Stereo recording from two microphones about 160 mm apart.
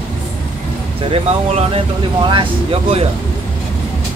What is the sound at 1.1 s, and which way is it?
Speech, 35° right (ahead or behind).